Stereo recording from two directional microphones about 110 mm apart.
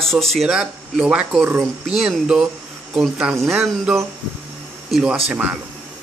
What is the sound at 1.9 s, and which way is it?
Speech, 5° right (ahead or behind).